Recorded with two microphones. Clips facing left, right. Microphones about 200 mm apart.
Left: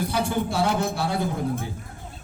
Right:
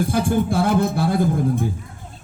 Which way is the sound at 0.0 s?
50° right (ahead or behind).